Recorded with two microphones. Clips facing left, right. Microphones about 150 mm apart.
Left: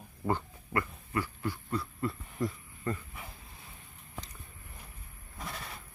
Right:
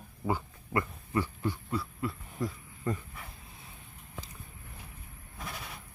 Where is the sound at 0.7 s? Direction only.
20° right (ahead or behind).